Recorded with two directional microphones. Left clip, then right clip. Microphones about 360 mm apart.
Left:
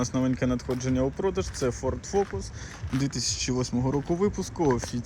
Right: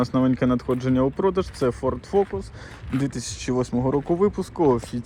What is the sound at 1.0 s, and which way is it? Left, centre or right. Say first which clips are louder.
Speech: right 6 dB; right.